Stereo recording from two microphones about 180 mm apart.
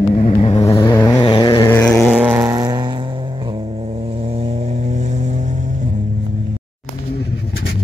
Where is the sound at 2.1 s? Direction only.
5° right (ahead or behind).